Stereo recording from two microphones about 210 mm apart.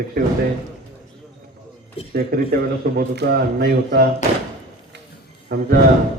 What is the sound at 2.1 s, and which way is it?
A man's voice, 45° right (ahead or behind).